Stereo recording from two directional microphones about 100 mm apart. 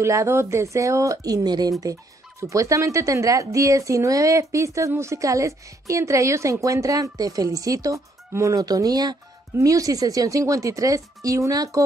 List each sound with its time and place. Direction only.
0.0 s speech: 30° right (ahead or behind)